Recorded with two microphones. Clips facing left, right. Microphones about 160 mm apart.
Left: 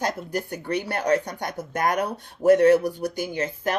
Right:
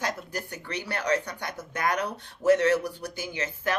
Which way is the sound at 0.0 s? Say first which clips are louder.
Left 5 dB; 45° left (ahead or behind).